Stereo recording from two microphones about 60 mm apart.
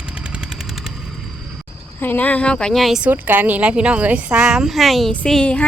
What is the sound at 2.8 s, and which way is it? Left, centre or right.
Speech, centre.